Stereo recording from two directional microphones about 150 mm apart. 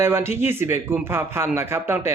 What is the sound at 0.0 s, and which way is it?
Speech, 15° right (ahead or behind).